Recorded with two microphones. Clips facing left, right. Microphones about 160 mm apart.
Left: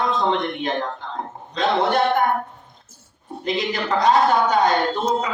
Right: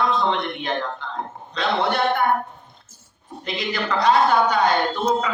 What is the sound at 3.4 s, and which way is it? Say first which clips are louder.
Speech: left 3 dB; 40° left (ahead or behind).